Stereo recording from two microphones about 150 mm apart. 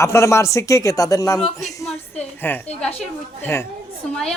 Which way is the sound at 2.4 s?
15° left (ahead or behind).